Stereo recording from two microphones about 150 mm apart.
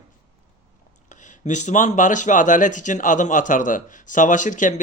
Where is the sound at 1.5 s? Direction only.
55° left (ahead or behind).